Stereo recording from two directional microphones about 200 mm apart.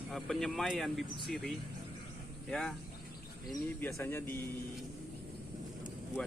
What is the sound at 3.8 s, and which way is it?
Speech, 10° left (ahead or behind).